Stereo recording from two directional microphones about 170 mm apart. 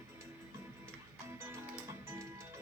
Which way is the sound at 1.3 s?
15° right (ahead or behind).